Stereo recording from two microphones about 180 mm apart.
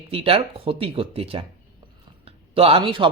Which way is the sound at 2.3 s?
30° right (ahead or behind).